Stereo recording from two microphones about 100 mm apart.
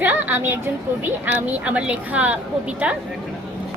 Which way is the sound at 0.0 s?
20° right (ahead or behind).